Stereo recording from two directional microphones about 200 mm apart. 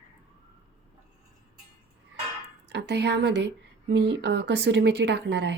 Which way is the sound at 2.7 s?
60° right (ahead or behind).